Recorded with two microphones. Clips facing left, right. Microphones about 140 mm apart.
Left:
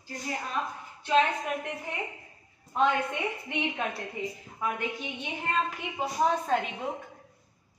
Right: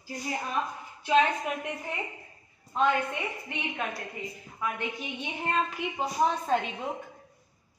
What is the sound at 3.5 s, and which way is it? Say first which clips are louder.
Speech: left 2 dB; 20° left (ahead or behind).